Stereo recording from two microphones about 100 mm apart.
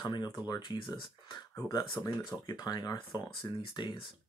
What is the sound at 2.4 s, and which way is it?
Speech, 45° left (ahead or behind).